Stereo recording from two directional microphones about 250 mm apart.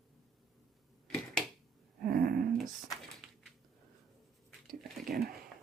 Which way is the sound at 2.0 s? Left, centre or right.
Right.